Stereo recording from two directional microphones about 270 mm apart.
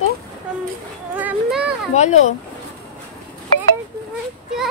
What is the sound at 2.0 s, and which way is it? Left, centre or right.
Speech, left.